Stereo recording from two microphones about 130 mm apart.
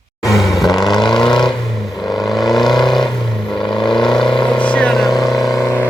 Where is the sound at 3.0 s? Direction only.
35° left (ahead or behind).